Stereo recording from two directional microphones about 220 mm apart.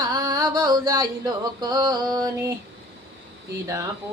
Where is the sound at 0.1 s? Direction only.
15° right (ahead or behind).